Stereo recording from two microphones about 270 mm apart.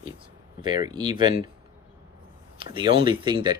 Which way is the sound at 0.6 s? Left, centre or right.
Centre.